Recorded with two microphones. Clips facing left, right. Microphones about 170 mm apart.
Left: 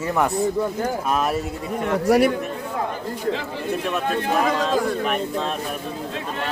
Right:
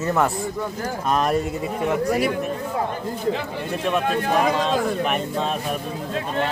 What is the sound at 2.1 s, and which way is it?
Speech, 75° left (ahead or behind).